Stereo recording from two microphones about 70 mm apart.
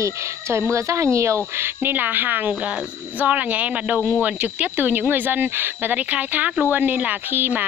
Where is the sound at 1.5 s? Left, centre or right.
Right.